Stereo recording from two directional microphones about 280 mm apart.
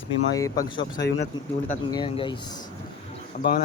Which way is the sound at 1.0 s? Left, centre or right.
Left.